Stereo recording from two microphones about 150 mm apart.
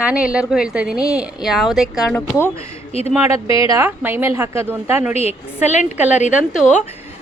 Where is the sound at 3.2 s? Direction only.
20° right (ahead or behind).